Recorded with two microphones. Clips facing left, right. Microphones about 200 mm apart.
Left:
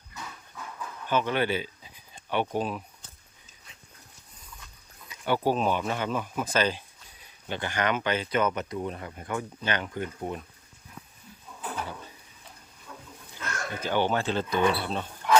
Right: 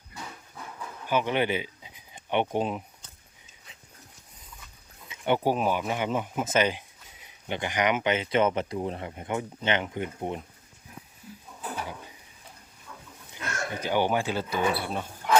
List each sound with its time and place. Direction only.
1.0 s speech: 15° right (ahead or behind)
5.0 s speech: 20° right (ahead or behind)
13.3 s speech: 15° right (ahead or behind)